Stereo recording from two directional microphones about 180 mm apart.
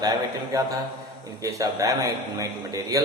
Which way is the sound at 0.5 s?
20° right (ahead or behind).